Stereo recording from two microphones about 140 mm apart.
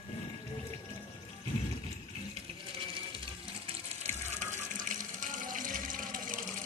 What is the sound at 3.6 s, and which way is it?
Water, 55° right (ahead or behind).